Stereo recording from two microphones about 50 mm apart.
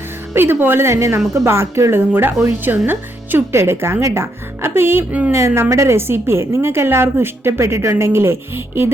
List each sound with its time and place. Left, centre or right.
0.3 s a woman's voice: right
3.6 s a woman's voice: right
5.3 s a woman's voice: right